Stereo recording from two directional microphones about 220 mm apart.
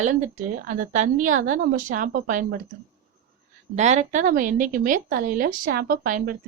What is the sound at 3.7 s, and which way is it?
Speech, 30° right (ahead or behind).